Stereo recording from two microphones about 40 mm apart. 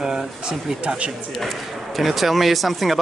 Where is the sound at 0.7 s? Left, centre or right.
Right.